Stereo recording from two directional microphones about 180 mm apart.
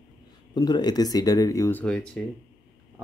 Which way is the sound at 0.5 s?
20° left (ahead or behind).